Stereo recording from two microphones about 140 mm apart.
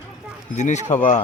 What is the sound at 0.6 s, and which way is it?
Speech, 55° left (ahead or behind).